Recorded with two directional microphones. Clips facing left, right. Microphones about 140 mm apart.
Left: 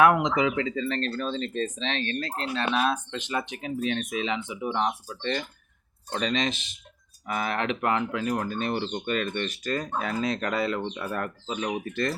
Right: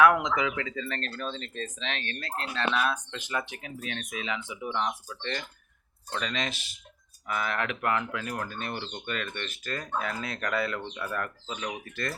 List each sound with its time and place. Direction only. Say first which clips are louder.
0.0 s speech: left 2 dB; 20° left (ahead or behind)